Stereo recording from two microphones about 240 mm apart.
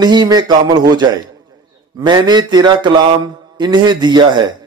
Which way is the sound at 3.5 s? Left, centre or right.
Centre.